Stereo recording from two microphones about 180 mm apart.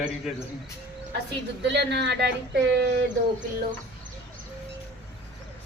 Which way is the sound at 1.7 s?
70° right (ahead or behind).